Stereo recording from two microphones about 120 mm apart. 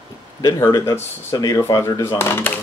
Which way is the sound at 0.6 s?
25° left (ahead or behind).